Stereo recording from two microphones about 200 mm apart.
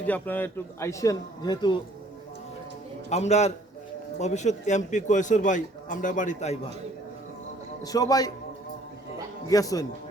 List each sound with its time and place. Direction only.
0.0 s a man's voice: 10° left (ahead or behind)
3.1 s a man's voice: 35° left (ahead or behind)
7.9 s a man's voice: 20° left (ahead or behind)
9.5 s a man's voice: 15° left (ahead or behind)